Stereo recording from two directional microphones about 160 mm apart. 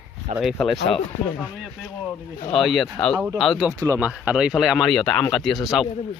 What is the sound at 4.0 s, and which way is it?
Speech, 10° right (ahead or behind).